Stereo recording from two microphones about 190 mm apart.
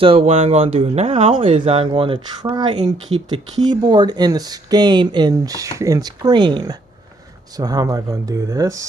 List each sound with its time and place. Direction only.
0.0 s speech: 30° right (ahead or behind)